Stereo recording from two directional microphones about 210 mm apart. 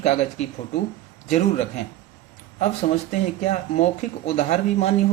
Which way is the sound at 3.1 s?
35° left (ahead or behind).